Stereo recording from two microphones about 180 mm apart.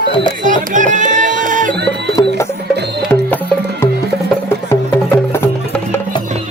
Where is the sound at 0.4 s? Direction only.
45° right (ahead or behind).